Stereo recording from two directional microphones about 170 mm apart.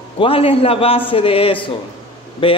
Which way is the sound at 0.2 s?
35° left (ahead or behind).